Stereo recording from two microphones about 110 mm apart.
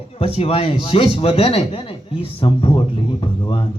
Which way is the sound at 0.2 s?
65° left (ahead or behind).